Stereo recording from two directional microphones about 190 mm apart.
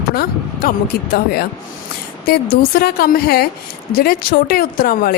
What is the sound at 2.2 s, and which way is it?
Speech, 55° left (ahead or behind).